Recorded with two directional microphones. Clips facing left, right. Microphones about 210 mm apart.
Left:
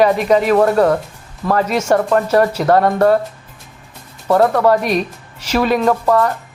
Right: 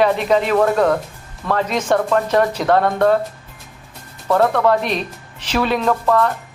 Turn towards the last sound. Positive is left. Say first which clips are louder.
# left 2 dB
turn(degrees=15)  # may be behind; listen again after turning